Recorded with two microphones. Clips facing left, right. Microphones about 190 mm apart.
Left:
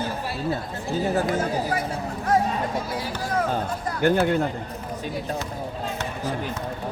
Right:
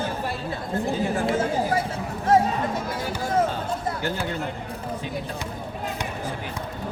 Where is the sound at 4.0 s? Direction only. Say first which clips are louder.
Left 8 dB; 55° left (ahead or behind).